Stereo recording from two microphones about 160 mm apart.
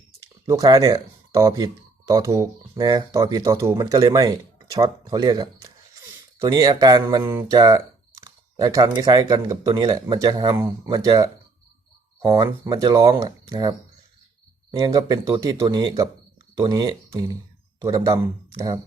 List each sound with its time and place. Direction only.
0.2 s speech: 20° right (ahead or behind)
12.3 s speech: 20° right (ahead or behind)